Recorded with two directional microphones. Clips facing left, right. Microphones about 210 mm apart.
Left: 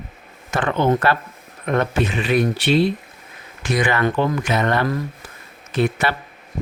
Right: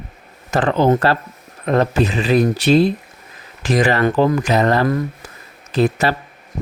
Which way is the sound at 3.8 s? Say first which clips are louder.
Right 4 dB; 35° right (ahead or behind).